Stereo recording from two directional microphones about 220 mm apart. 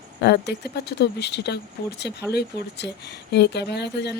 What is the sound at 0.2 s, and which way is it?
Speech, 50° left (ahead or behind).